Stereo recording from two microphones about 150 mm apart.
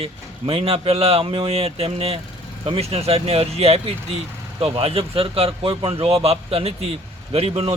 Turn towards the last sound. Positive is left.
turn(degrees=-40)  # may be behind; listen again after turning